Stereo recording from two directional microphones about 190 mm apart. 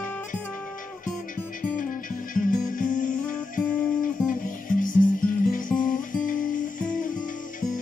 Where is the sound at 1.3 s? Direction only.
45° left (ahead or behind).